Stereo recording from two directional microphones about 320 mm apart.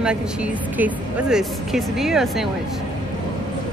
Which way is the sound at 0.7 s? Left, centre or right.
Centre.